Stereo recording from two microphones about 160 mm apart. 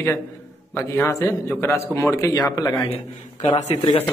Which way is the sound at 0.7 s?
15° left (ahead or behind).